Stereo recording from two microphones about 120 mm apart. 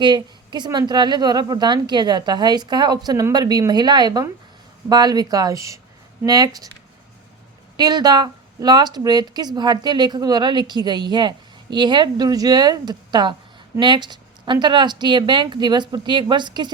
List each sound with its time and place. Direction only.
0.0 s speech: 40° right (ahead or behind)
7.8 s speech: 35° right (ahead or behind)